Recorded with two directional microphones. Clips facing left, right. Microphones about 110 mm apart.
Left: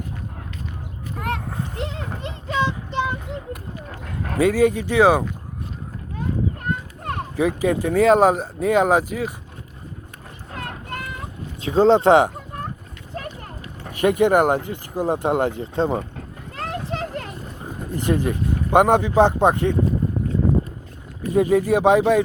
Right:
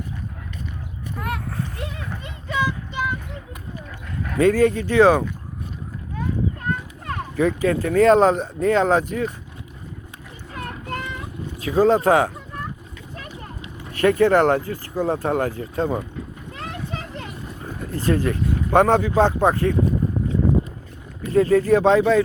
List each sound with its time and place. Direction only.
1.5 s speech: 20° left (ahead or behind)
2.6 s child singing: 25° left (ahead or behind)
4.4 s speech: 10° left (ahead or behind)
7.3 s speech: 15° left (ahead or behind)
10.5 s a sound: 50° left (ahead or behind)
11.5 s speech: 25° left (ahead or behind)
13.9 s speech: 15° left (ahead or behind)
16.6 s a sound: 35° left (ahead or behind)
17.9 s speech: 15° left (ahead or behind)
21.2 s speech: 15° left (ahead or behind)